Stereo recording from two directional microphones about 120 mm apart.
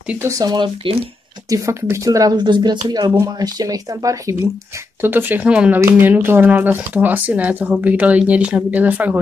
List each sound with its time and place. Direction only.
0.2 s speech: 30° right (ahead or behind)
5.0 s speech: 15° right (ahead or behind)